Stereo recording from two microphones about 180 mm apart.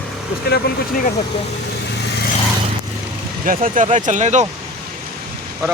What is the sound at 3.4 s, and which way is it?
Speech, 50° right (ahead or behind).